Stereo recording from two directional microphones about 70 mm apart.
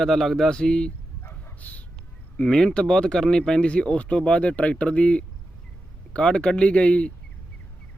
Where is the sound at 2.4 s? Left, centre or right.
Centre.